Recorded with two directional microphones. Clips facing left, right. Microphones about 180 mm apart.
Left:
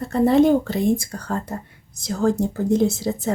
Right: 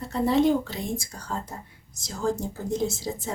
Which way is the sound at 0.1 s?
55° left (ahead or behind).